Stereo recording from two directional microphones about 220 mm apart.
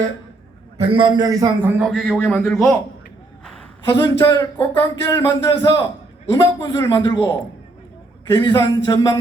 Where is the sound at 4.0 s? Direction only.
20° left (ahead or behind).